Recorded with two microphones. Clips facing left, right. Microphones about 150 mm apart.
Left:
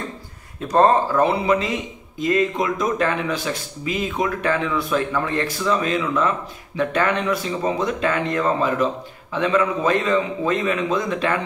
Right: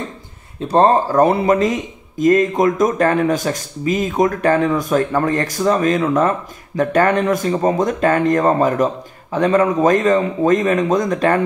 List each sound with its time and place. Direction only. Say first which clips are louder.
0.6 s speech: right 3 dB; 30° right (ahead or behind)